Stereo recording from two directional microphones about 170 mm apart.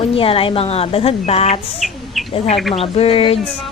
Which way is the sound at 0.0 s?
35° left (ahead or behind).